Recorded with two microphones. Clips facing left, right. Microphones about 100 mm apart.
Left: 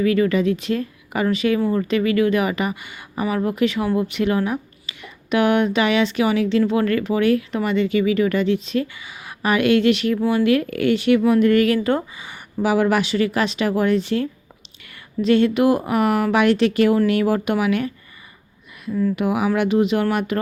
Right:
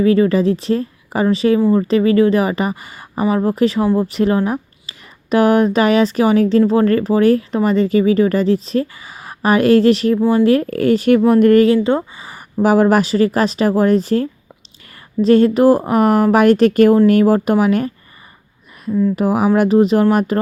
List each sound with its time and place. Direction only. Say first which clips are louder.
0.0 s speech: right 5 dB; 30° right (ahead or behind)
11.6 s speech: right 5 dB; 25° right (ahead or behind)
19.1 s speech: right 6 dB; 35° right (ahead or behind)